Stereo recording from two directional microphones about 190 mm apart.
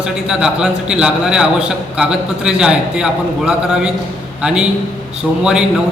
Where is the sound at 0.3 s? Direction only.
5° right (ahead or behind).